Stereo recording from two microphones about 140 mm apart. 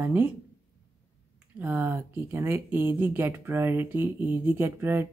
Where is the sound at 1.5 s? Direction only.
15° right (ahead or behind).